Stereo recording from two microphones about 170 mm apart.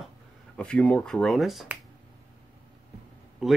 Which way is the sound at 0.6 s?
5° left (ahead or behind).